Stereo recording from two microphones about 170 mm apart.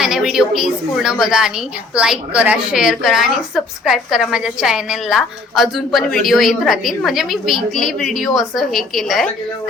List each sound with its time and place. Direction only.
0.0 s a woman's voice: 5° right (ahead or behind)